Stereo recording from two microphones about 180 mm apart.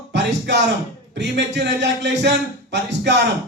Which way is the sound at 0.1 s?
75° right (ahead or behind).